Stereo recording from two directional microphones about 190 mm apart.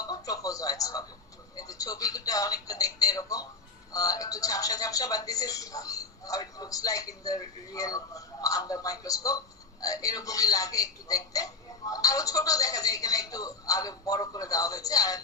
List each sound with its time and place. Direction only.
0.0 s television: 20° left (ahead or behind)
1.5 s speech: 20° left (ahead or behind)